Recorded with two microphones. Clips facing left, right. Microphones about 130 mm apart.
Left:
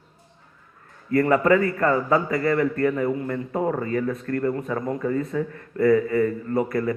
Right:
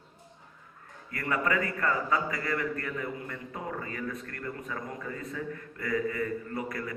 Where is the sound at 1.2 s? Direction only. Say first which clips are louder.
Left 10 dB; 50° left (ahead or behind).